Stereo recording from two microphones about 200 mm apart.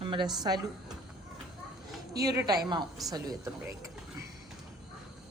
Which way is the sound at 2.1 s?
15° right (ahead or behind).